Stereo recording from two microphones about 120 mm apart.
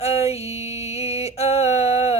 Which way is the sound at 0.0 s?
60° left (ahead or behind).